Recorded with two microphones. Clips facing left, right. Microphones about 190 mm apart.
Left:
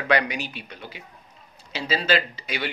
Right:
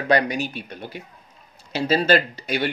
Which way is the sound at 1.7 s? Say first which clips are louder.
Right 5 dB; 50° right (ahead or behind).